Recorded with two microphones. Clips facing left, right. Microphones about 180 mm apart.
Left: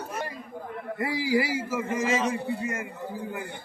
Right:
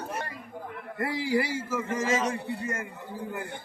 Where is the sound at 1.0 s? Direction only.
5° left (ahead or behind).